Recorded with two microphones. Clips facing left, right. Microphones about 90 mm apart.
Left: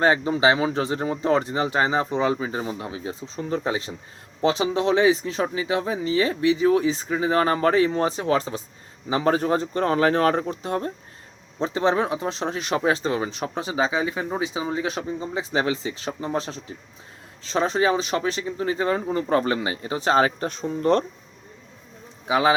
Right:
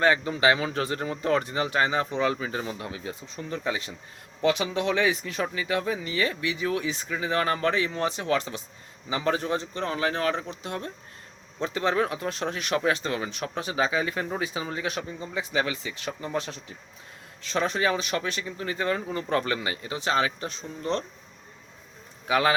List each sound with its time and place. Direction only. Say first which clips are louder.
0.0 s speech: left 3 dB; 30° left (ahead or behind); by 21.0 s 50° left (ahead or behind)
22.3 s speech: left 3 dB; 20° left (ahead or behind)